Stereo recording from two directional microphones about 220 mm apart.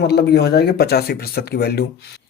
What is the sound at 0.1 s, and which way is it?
Speech, 45° left (ahead or behind).